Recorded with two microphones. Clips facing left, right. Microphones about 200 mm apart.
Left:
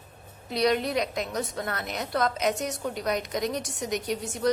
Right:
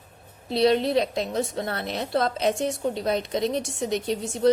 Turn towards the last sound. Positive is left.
turn(degrees=-25)  # may be behind; listen again after turning